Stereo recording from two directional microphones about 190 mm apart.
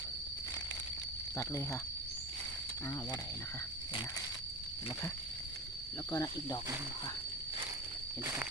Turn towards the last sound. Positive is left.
turn(degrees=20)  # may be behind; listen again after turning